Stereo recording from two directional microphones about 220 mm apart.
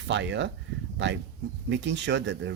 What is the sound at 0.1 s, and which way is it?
Speech, 55° right (ahead or behind).